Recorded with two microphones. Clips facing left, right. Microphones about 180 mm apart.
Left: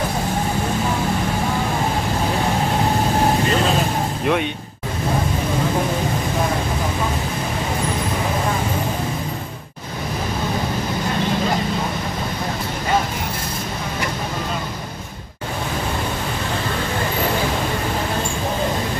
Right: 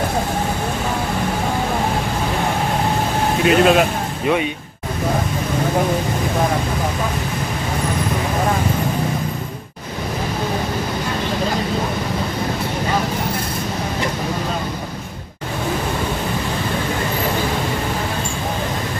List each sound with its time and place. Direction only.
3.4 s speech: 70° right (ahead or behind)